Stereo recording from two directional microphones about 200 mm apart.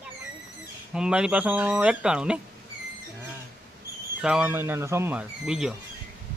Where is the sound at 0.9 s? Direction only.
5° right (ahead or behind).